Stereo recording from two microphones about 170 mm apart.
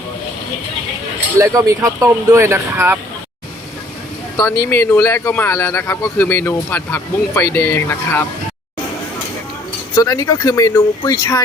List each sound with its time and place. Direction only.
1.4 s speech: 20° right (ahead or behind)
4.4 s speech: 20° left (ahead or behind)
9.9 s speech: 20° left (ahead or behind)